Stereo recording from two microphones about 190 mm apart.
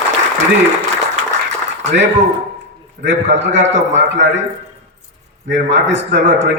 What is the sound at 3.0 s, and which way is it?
Speech, 70° right (ahead or behind).